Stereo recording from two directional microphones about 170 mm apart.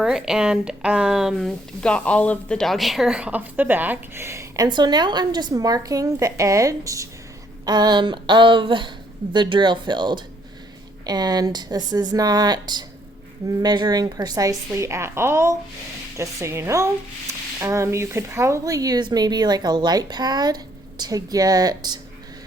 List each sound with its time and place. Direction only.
0.0 s speech: 5° right (ahead or behind); by 21.9 s 20° right (ahead or behind)